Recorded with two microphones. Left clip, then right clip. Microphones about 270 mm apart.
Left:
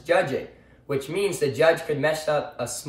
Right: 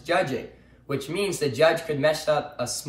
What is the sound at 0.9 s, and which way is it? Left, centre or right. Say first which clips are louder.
Speech: left 2 dB; centre.